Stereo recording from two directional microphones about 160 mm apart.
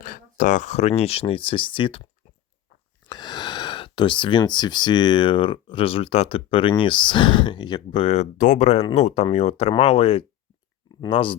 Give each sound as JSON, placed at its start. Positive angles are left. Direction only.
{"t": 0.0, "sound": "speech", "side_deg": 55}
{"t": 3.1, "sound": "speech", "side_deg": 25}